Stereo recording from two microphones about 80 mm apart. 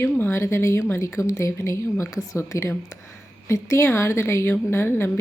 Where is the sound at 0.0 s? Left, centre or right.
Left.